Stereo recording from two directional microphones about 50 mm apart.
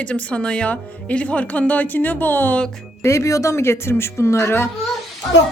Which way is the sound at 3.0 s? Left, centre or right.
Left.